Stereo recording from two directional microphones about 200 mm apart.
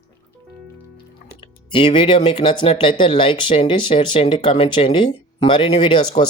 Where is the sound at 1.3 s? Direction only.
25° left (ahead or behind).